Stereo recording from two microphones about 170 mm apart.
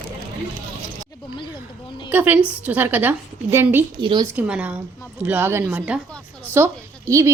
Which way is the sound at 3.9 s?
25° right (ahead or behind).